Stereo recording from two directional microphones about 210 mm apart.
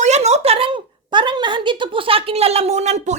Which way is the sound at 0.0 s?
30° right (ahead or behind).